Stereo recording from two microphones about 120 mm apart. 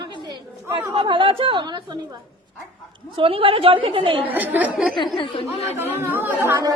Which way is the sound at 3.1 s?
50° right (ahead or behind).